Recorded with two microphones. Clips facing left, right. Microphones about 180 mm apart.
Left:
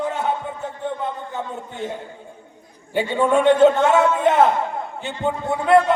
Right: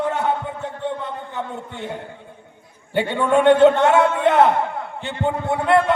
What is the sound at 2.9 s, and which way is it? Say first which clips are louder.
A man's voice: even; 65° right (ahead or behind).